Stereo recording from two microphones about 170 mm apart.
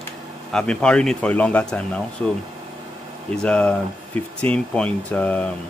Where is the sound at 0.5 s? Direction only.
5° left (ahead or behind).